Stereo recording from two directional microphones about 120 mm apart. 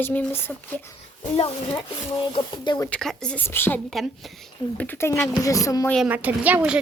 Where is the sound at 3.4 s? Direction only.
20° left (ahead or behind).